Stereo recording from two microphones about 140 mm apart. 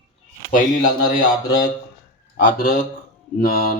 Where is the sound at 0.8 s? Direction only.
70° left (ahead or behind).